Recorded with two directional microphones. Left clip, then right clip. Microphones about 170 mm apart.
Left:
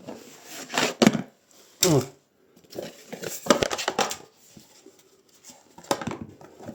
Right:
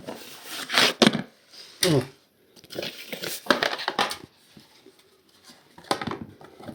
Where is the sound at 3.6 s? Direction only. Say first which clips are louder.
Even; 65° left (ahead or behind).